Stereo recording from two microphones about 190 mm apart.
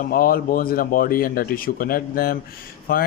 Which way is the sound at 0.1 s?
50° left (ahead or behind).